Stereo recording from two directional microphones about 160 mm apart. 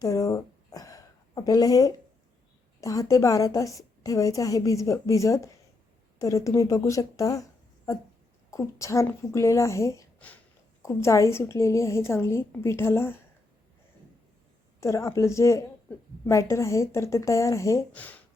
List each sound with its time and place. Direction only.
0.0 s a sound: 20° left (ahead or behind)
2.8 s a woman's voice: 20° left (ahead or behind)
8.4 s a woman's voice: 20° left (ahead or behind)
14.8 s a woman's voice: 20° left (ahead or behind)